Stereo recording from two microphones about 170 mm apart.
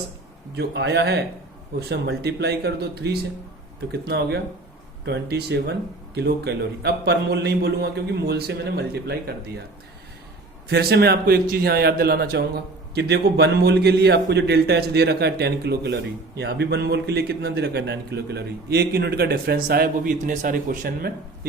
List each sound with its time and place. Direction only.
0.5 s a man's voice: 85° right
10.7 s speech: 70° right (ahead or behind)